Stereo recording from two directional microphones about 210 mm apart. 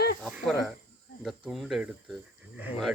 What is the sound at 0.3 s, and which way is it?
Speech, 5° right (ahead or behind).